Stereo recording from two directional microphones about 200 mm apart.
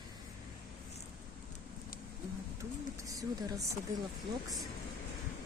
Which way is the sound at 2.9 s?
15° right (ahead or behind).